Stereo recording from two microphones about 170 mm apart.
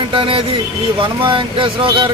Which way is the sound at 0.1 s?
30° right (ahead or behind).